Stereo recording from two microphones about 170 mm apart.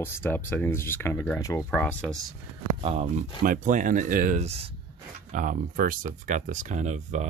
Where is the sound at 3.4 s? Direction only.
50° right (ahead or behind).